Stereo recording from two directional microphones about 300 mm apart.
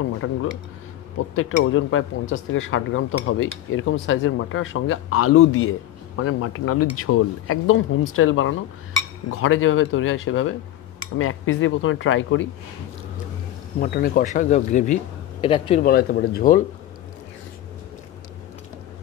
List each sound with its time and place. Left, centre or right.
0.2 s speech: left
13.7 s speech: left
15.8 s speech: left